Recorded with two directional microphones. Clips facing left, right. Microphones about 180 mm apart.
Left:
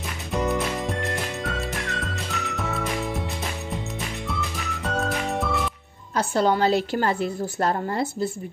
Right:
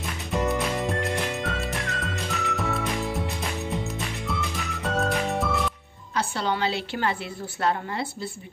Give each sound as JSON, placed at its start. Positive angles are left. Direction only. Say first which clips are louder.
{"t": 0.3, "sound": "music", "louder": "left 1 dB", "side_deg": 0}
{"t": 4.3, "sound": "music", "louder": "even", "side_deg": 0}
{"t": 6.1, "sound": "a woman's voice", "louder": "left 6 dB", "side_deg": 45}